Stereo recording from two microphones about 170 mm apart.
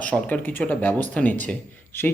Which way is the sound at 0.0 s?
10° left (ahead or behind).